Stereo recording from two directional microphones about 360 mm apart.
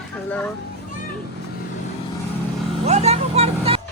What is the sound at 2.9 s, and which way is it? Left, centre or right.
Speech, centre.